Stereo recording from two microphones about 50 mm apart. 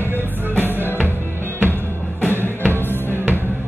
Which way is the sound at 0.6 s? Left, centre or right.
Right.